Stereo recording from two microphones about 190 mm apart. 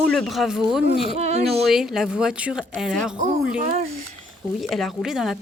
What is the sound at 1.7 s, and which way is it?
Speech, centre (ahead or behind).